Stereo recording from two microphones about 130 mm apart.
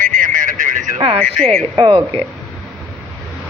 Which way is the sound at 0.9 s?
50° right (ahead or behind).